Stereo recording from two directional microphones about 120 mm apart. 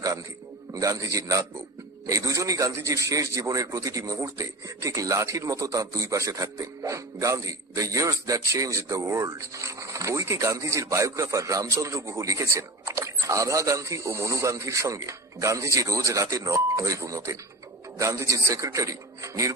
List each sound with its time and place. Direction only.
0.7 s a man's voice: 30° right (ahead or behind)